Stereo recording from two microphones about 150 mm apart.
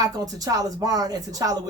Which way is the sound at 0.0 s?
25° right (ahead or behind).